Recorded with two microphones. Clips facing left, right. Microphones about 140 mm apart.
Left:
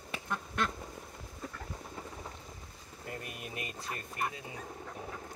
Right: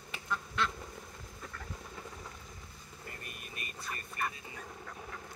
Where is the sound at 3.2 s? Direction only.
90° left.